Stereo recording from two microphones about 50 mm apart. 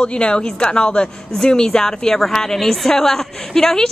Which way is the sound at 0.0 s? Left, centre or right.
Centre.